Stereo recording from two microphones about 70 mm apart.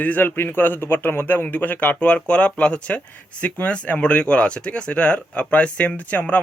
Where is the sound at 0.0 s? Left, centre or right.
Left.